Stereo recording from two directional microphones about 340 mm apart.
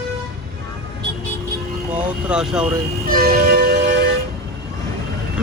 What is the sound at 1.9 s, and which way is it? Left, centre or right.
Speech, centre.